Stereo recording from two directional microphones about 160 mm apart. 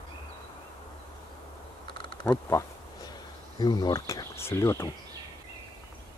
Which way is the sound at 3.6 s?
25° left (ahead or behind).